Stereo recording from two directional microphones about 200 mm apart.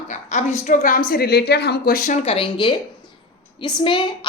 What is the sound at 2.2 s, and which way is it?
A woman's voice, 30° left (ahead or behind).